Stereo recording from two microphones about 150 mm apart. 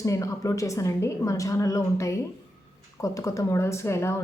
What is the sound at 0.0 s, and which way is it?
A woman's voice, 20° left (ahead or behind).